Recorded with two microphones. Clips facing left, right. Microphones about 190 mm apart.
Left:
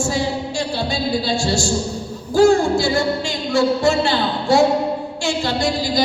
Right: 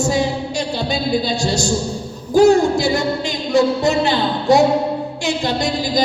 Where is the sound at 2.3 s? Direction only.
20° right (ahead or behind).